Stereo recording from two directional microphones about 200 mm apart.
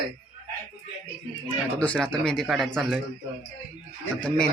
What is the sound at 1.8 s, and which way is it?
A man's voice, 5° left (ahead or behind).